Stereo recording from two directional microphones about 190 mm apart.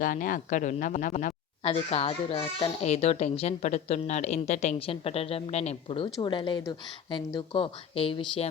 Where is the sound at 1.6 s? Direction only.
30° left (ahead or behind).